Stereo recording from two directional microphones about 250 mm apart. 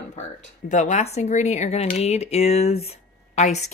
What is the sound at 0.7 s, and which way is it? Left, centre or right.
A woman's voice, left.